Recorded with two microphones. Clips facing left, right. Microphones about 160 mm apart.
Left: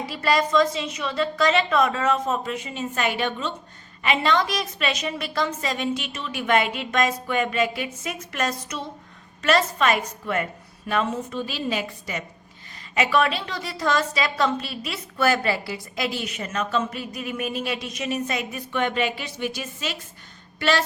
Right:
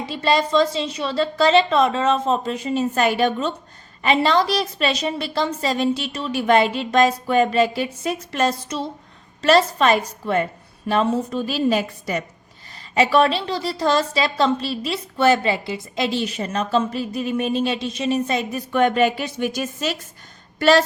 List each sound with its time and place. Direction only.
0.0 s a woman's voice: 25° right (ahead or behind)
18.7 s a woman's voice: 45° right (ahead or behind)